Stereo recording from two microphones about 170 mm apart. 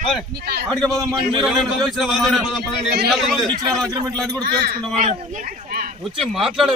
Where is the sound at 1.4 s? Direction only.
Centre (ahead or behind).